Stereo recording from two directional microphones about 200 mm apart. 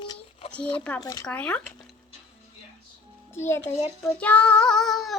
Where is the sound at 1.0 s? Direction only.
15° left (ahead or behind).